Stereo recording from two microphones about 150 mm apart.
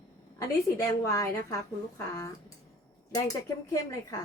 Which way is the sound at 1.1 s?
20° left (ahead or behind).